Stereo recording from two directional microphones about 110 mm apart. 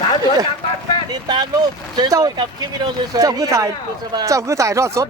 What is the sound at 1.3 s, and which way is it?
Speech, 40° right (ahead or behind).